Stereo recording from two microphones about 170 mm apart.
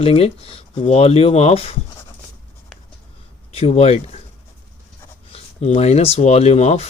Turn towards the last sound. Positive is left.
turn(degrees=40)  # may be behind; listen again after turning